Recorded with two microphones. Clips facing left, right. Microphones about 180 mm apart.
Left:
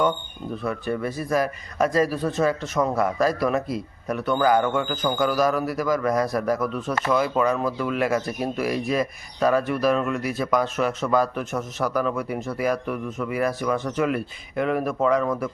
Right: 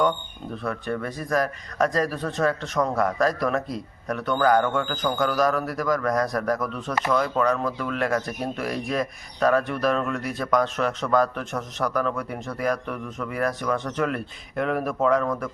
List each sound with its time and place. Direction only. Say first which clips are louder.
0.5 s speech: left 2 dB; 5° left (ahead or behind)